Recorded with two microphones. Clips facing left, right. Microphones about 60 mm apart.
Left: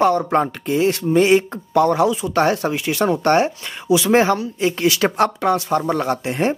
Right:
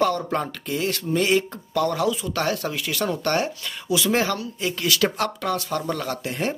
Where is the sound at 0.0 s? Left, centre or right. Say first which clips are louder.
Left 6 dB; left.